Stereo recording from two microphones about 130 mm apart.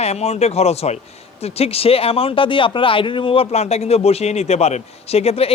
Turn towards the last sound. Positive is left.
turn(degrees=50)  # may be behind; listen again after turning